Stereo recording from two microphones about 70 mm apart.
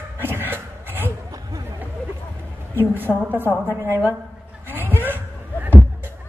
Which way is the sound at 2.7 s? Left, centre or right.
Right.